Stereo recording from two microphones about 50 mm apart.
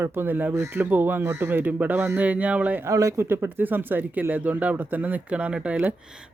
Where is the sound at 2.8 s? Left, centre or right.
Right.